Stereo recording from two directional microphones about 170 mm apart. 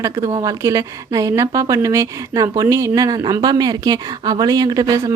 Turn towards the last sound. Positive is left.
turn(degrees=-20)  # may be behind; listen again after turning